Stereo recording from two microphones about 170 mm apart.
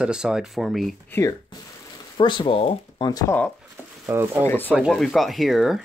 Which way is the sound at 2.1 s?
30° left (ahead or behind).